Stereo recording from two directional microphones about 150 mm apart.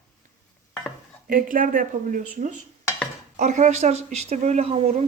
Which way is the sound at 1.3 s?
65° right (ahead or behind).